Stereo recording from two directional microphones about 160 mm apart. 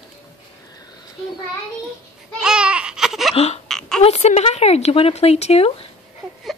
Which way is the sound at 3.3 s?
40° left (ahead or behind).